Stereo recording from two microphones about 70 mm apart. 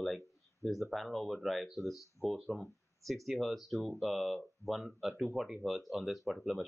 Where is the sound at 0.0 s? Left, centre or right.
Centre.